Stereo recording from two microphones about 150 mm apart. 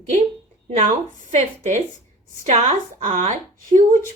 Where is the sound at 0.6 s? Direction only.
45° right (ahead or behind).